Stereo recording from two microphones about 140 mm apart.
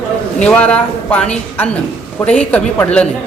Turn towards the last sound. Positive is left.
turn(degrees=10)  # may be behind; listen again after turning